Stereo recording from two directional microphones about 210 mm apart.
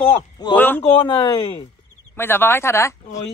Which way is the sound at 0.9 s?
25° left (ahead or behind).